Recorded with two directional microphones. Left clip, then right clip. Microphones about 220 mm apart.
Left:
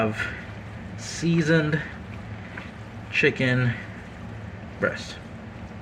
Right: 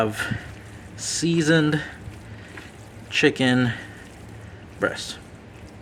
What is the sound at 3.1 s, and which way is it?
Speech, 90° right.